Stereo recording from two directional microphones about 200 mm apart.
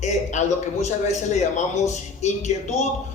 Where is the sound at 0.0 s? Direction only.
35° left (ahead or behind).